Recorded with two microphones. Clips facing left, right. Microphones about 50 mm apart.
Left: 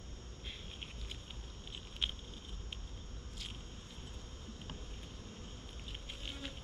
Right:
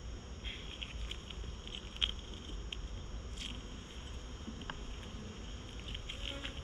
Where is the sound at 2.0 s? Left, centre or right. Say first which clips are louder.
Right 2 dB; right.